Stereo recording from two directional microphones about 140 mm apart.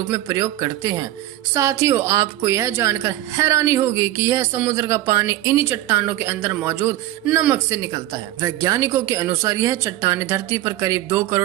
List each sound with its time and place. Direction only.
0.1 s a woman's voice: 25° right (ahead or behind)